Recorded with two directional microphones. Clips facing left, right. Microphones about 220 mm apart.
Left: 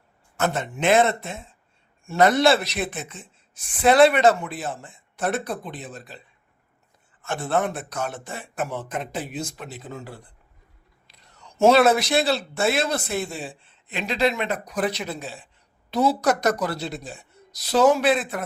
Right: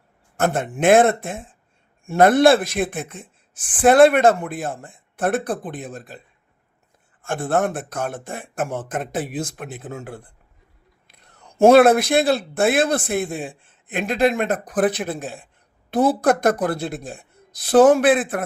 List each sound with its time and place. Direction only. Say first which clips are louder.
0.3 s a woman's voice: right 4 dB; 50° right (ahead or behind)
11.1 s a sound: right 1 dB; 55° right (ahead or behind)
11.6 s a woman's voice: right 5 dB; 55° right (ahead or behind)